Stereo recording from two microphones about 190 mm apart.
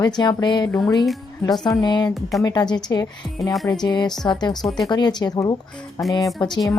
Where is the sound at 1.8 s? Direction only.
20° left (ahead or behind).